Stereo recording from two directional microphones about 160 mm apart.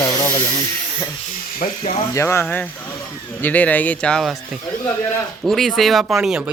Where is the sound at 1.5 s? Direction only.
55° left (ahead or behind).